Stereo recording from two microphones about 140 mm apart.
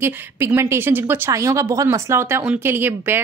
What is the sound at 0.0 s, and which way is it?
A woman's voice, 15° right (ahead or behind).